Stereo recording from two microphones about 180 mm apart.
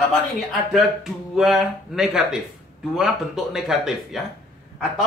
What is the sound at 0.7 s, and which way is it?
Speech, centre (ahead or behind).